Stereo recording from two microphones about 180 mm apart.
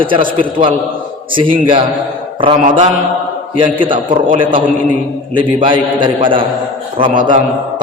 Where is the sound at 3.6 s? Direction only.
25° right (ahead or behind).